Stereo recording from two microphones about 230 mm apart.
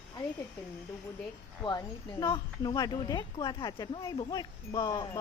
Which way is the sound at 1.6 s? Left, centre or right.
Centre.